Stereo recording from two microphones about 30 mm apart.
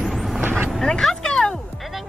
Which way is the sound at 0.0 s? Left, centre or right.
Centre.